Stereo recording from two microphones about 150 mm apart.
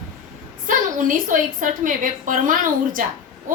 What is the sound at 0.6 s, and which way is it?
A woman's voice, 60° right (ahead or behind).